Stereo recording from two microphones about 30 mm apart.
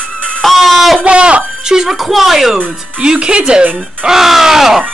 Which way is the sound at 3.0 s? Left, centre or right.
Right.